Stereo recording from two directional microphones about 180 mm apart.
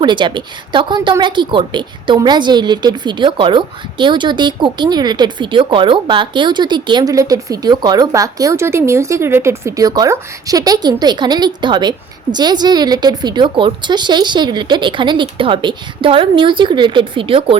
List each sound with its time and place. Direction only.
0.0 s a woman's voice: 25° right (ahead or behind)